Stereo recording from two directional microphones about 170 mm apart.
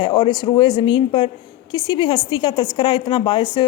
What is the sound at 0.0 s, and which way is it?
Speech, 25° left (ahead or behind).